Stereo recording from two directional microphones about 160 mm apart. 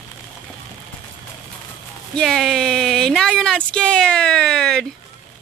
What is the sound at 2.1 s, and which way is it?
Speech, 5° left (ahead or behind).